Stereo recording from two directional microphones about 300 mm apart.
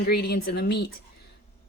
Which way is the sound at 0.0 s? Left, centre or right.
Left.